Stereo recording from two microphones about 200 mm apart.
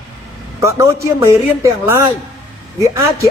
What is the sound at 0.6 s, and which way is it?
A woman's voice, 15° right (ahead or behind).